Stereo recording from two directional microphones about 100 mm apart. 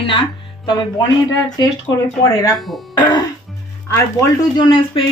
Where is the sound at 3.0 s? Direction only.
50° left (ahead or behind).